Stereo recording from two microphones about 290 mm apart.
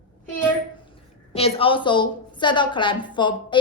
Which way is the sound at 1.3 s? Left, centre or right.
Left.